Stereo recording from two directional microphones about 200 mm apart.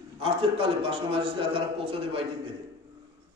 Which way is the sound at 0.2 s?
30° right (ahead or behind).